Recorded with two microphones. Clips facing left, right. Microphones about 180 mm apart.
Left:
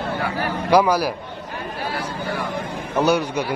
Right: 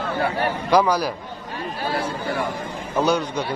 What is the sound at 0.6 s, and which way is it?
Speech, 10° left (ahead or behind).